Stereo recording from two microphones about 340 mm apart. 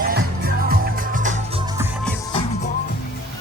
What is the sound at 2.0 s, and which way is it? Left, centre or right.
Music, centre.